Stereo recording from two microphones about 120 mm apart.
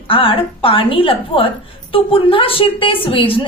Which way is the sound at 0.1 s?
50° left (ahead or behind).